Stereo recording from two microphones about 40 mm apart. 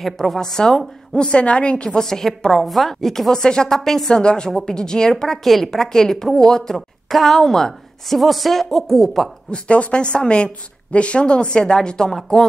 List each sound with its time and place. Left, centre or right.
0.0 s a woman's voice: centre; by 1.9 s left
1.9 s a woman's voice: centre
4.2 s speech: left
4.5 s a woman's voice: centre
4.7 s a woman's voice: centre
7.1 s a woman's voice: centre
9.5 s a woman's voice: left; by 12.4 s centre